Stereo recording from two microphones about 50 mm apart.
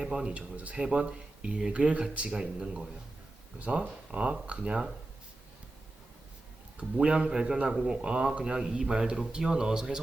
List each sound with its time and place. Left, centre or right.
0.0 s speech: centre
0.3 s speech: right
3.6 s speech: right
6.7 s speech: right